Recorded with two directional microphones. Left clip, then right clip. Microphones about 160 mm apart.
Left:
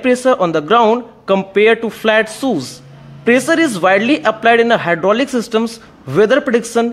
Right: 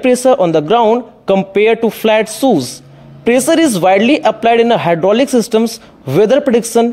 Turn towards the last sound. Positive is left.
turn(degrees=-25)  # may be behind; listen again after turning